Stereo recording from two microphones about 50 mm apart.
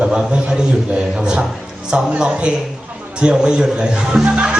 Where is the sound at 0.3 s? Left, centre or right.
Centre.